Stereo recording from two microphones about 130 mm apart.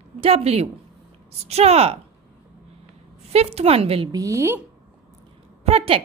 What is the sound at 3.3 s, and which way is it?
Speech, 50° right (ahead or behind).